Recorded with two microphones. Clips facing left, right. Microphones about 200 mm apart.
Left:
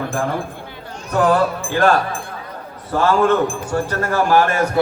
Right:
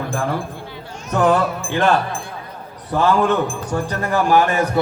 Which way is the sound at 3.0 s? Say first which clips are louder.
Left 1 dB; 15° right (ahead or behind).